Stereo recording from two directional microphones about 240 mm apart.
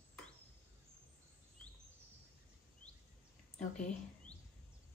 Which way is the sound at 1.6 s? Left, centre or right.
Centre.